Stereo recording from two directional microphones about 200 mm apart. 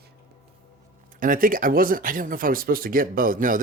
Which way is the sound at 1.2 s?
45° right (ahead or behind).